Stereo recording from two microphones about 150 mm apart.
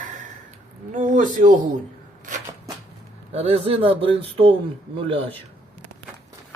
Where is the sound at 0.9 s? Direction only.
60° right (ahead or behind).